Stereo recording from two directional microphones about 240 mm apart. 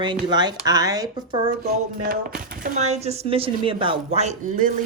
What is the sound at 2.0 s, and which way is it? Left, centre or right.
Speech, right.